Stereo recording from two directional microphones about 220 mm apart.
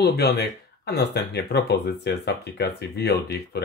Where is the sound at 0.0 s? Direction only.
45° left (ahead or behind).